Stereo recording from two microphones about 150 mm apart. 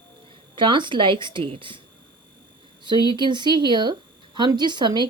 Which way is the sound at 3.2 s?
30° right (ahead or behind).